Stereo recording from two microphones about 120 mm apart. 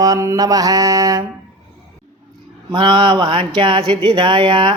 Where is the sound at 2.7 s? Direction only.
45° right (ahead or behind).